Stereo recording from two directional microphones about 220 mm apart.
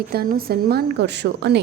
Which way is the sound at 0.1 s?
45° right (ahead or behind).